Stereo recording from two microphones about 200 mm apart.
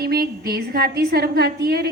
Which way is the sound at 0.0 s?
50° right (ahead or behind).